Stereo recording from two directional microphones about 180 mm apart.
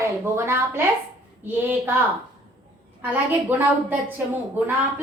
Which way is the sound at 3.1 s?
10° right (ahead or behind).